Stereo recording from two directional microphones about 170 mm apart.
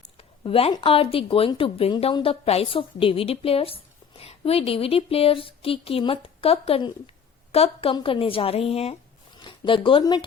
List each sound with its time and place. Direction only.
0.2 s speech: 35° left (ahead or behind)